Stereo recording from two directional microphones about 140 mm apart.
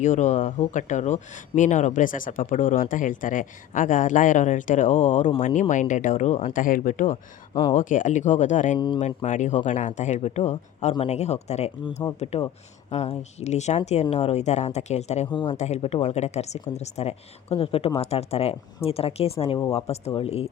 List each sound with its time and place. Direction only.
0.0 s speech: 60° left (ahead or behind)
15.3 s speech: 35° left (ahead or behind)
15.5 s speech: 50° left (ahead or behind)